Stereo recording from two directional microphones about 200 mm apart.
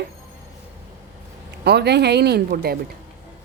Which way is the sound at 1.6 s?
55° right (ahead or behind).